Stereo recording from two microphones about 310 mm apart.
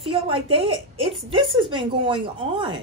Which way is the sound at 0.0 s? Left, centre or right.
Centre.